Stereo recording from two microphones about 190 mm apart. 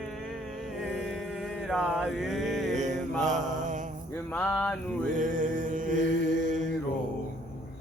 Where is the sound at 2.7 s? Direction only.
40° right (ahead or behind).